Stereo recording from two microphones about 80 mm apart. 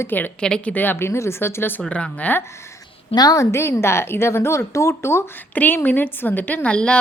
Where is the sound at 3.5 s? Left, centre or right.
Left.